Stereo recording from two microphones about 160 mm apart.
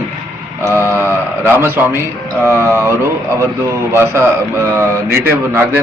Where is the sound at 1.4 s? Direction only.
15° right (ahead or behind).